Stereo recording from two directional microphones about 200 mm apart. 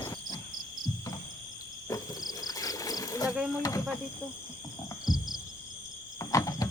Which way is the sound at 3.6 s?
15° left (ahead or behind).